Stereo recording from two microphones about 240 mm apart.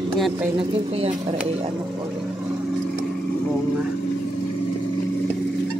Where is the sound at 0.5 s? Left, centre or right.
Right.